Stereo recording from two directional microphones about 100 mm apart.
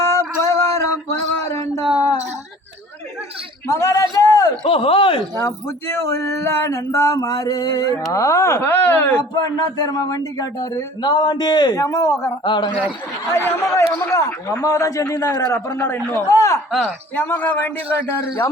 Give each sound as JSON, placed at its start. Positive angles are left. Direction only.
{"t": 0.0, "sound": "a sound", "side_deg": 30}
{"t": 3.7, "sound": "a sound", "side_deg": 30}
{"t": 4.6, "sound": "speech", "side_deg": 65}
{"t": 5.4, "sound": "a man's voice", "side_deg": 25}
{"t": 9.1, "sound": "speech", "side_deg": 45}
{"t": 12.5, "sound": "speech", "side_deg": 50}
{"t": 13.3, "sound": "a man's voice", "side_deg": 25}
{"t": 16.7, "sound": "a man's voice", "side_deg": 15}